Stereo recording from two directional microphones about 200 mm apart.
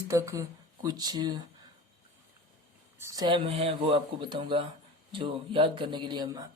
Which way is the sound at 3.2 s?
25° right (ahead or behind).